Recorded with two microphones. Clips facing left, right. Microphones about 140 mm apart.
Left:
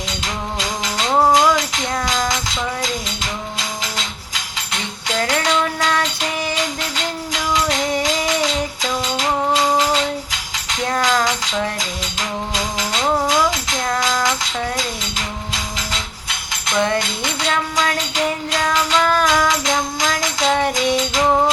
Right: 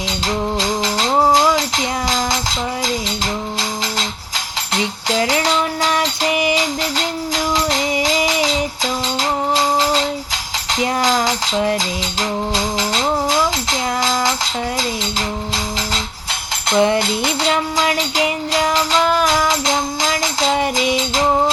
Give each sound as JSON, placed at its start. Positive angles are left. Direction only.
{"t": 0.6, "sound": "music", "side_deg": -30}
{"t": 4.7, "sound": "music", "side_deg": -35}
{"t": 10.7, "sound": "tambourine", "side_deg": -35}
{"t": 12.5, "sound": "music", "side_deg": -30}
{"t": 16.6, "sound": "music", "side_deg": -30}